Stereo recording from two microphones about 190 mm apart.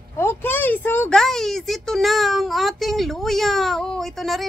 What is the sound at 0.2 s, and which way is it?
Speech, 10° left (ahead or behind).